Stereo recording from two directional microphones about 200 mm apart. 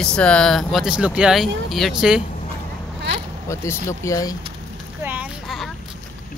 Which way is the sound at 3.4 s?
15° left (ahead or behind).